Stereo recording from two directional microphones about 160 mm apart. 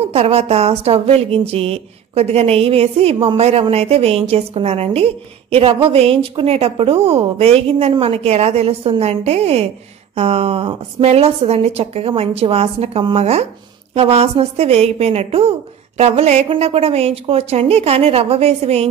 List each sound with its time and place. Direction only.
0.0 s speech: 40° right (ahead or behind)